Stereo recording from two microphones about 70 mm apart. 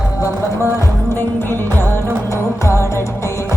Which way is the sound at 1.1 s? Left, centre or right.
Left.